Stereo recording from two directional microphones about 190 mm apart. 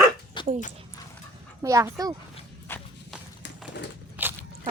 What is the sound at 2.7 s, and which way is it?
Horse, 10° left (ahead or behind).